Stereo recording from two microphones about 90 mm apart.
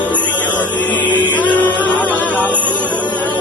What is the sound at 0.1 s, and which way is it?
Music, 15° left (ahead or behind).